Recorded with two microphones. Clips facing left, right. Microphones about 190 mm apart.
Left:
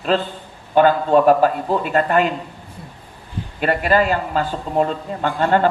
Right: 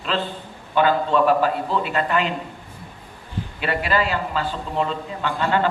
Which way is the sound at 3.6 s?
45° left (ahead or behind).